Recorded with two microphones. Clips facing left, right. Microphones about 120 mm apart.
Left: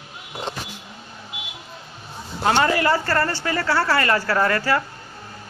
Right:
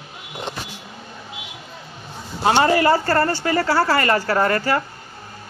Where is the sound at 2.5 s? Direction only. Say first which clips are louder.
Right 3 dB; 30° right (ahead or behind).